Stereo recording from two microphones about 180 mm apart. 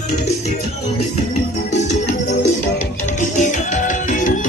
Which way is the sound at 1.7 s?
40° left (ahead or behind).